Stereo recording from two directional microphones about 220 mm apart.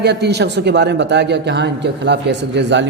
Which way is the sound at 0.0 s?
50° right (ahead or behind).